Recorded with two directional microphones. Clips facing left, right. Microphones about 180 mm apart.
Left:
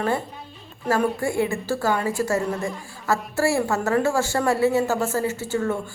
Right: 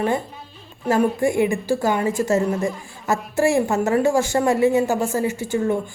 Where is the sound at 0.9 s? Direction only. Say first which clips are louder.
Right 4 dB; 15° right (ahead or behind).